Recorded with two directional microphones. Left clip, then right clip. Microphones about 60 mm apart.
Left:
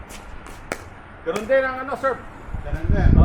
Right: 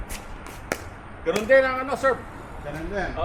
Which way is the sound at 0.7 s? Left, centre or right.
Centre.